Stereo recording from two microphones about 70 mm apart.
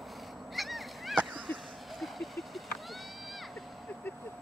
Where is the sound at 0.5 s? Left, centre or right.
Centre.